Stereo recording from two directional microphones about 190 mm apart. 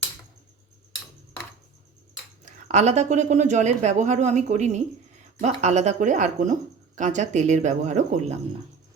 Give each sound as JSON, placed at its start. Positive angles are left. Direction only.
{"t": 2.4, "sound": "speech", "side_deg": -35}